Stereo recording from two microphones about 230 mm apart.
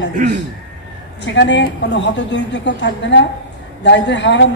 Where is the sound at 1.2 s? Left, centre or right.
Left.